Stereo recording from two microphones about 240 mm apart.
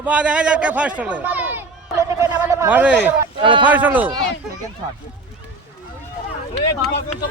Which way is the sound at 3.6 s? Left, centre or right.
Centre.